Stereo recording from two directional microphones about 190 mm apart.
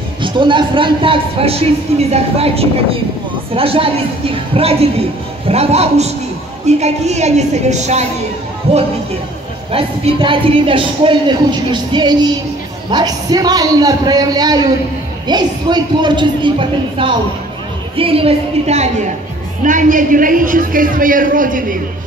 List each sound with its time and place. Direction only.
0.2 s a man's voice: 25° right (ahead or behind); by 21.7 s 45° right (ahead or behind)